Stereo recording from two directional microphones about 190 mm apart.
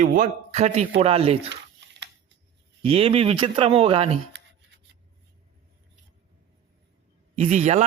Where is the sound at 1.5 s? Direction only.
70° right (ahead or behind).